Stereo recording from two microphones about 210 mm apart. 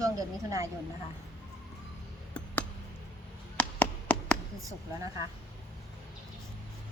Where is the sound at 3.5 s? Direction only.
5° left (ahead or behind).